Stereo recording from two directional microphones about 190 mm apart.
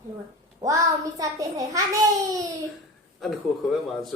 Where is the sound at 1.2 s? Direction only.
20° right (ahead or behind).